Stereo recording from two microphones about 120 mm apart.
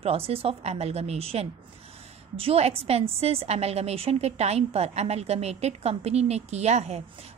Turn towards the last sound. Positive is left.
turn(degrees=-70)  # may be behind; listen again after turning